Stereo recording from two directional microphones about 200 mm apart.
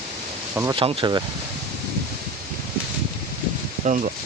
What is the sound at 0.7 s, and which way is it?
Speech, 25° right (ahead or behind).